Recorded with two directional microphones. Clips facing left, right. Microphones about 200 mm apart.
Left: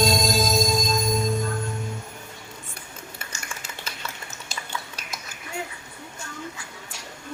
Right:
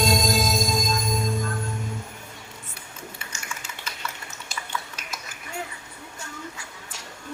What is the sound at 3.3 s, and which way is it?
Cutlery, 35° left (ahead or behind).